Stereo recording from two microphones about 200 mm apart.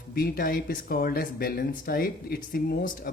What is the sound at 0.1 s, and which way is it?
Speech, 50° left (ahead or behind).